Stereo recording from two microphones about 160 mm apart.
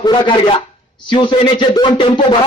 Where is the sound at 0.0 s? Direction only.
30° left (ahead or behind).